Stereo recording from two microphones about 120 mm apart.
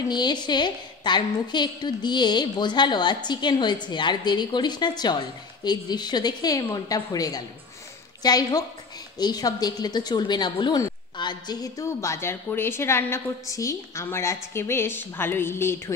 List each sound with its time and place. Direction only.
0.1 s a woman's voice: 40° left (ahead or behind); by 15.8 s 20° left (ahead or behind)